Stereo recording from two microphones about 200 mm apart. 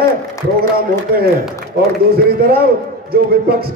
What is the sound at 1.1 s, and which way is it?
A man's voice, 50° right (ahead or behind).